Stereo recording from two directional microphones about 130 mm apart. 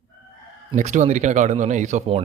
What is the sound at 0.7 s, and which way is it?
Speech, 65° right (ahead or behind).